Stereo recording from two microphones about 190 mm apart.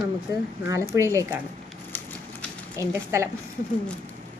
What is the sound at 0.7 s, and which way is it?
Speech, 15° right (ahead or behind).